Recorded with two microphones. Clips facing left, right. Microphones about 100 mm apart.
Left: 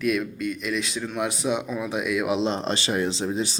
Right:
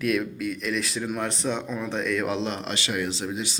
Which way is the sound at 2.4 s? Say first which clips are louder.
Left 4 dB; 30° left (ahead or behind).